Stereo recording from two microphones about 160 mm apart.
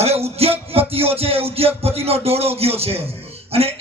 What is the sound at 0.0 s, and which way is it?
Speech, 40° right (ahead or behind).